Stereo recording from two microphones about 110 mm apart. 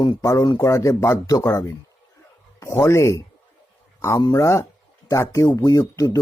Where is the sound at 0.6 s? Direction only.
30° left (ahead or behind).